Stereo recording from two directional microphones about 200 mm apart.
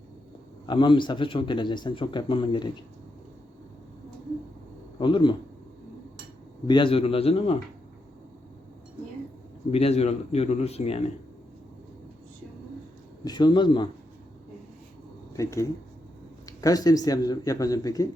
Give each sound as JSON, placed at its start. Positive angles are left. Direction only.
{"t": 0.7, "sound": "speech", "side_deg": 25}
{"t": 4.9, "sound": "a man's voice", "side_deg": 25}
{"t": 6.7, "sound": "speech", "side_deg": 25}
{"t": 9.7, "sound": "speech", "side_deg": 30}
{"t": 13.2, "sound": "speech", "side_deg": 20}
{"t": 15.3, "sound": "speech", "side_deg": 15}